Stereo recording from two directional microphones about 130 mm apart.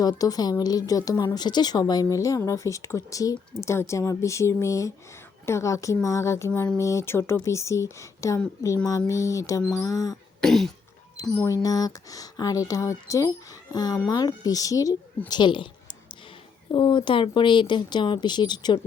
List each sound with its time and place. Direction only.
0.0 s speech: 30° left (ahead or behind)
10.4 s cough: 5° left (ahead or behind)
11.2 s speech: 20° left (ahead or behind); by 15.7 s 40° left (ahead or behind)
16.7 s speech: 40° left (ahead or behind)